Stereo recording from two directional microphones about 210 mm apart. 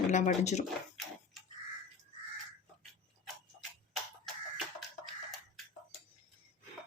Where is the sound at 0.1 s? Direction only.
35° left (ahead or behind).